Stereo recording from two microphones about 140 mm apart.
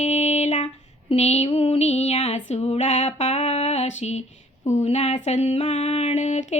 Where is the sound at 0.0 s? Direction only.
50° left (ahead or behind).